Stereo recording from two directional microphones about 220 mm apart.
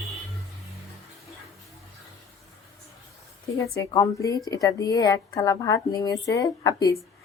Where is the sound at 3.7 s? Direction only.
15° left (ahead or behind).